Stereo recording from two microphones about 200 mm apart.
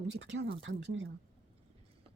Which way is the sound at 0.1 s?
65° right (ahead or behind).